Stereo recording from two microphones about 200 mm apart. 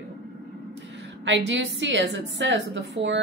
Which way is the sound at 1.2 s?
65° right (ahead or behind).